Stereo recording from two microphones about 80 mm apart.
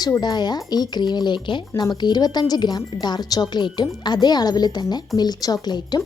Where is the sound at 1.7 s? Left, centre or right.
Left.